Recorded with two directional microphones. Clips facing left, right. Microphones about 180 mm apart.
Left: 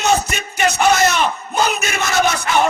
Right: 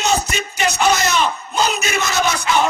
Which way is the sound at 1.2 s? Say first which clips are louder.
Left 1 dB; 55° left (ahead or behind).